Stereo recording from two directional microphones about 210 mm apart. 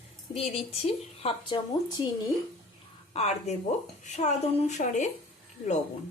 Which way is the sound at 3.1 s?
30° left (ahead or behind).